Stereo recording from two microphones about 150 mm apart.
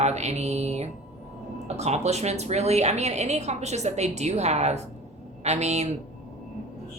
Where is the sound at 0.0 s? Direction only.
50° right (ahead or behind).